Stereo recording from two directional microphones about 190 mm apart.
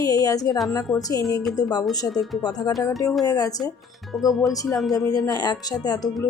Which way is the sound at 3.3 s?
20° left (ahead or behind).